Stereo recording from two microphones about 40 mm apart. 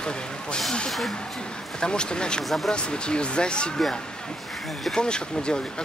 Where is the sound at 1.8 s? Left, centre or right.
Left.